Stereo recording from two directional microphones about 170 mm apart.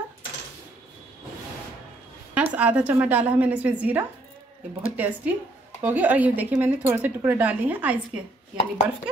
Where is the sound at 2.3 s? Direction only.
10° right (ahead or behind).